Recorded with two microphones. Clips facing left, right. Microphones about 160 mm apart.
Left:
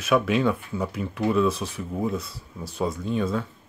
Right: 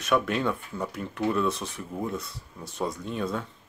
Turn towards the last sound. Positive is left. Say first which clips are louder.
# left 5 dB
turn(degrees=0)  # may be behind; listen again after turning